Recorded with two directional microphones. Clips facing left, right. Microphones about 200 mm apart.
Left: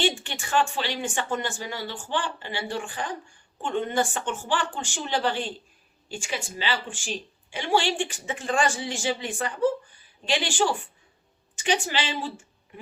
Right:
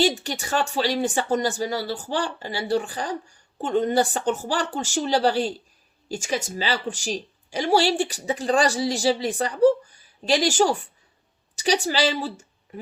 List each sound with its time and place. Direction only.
0.2 s speech: 40° right (ahead or behind)